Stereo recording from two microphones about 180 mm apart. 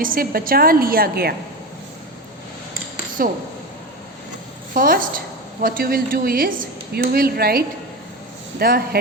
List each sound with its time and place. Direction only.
0.0 s a woman's voice: 50° right (ahead or behind)
4.7 s a woman's voice: 50° right (ahead or behind)